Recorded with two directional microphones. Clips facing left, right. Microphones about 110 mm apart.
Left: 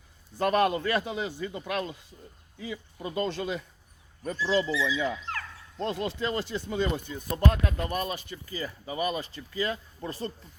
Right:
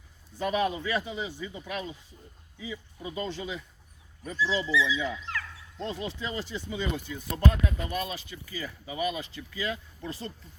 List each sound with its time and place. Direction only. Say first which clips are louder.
0.3 s a man's voice: left 4 dB; 70° left (ahead or behind)
4.2 s speech: left 3 dB; 45° left (ahead or behind)
5.8 s speech: left 4 dB; 70° left (ahead or behind)
7.1 s speech: left 1 dB; 30° left (ahead or behind)
7.6 s speech: left 2 dB; 45° left (ahead or behind)